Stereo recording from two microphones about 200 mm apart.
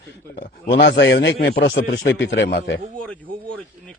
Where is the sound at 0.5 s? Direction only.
60° left (ahead or behind).